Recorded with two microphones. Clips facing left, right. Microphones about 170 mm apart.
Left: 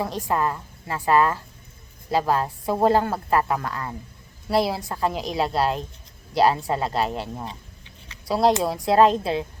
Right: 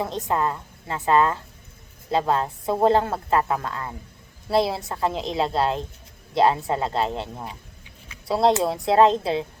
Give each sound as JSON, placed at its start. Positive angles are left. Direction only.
{"t": 0.0, "sound": "a woman's voice", "side_deg": -25}
{"t": 8.3, "sound": "a woman's voice", "side_deg": -25}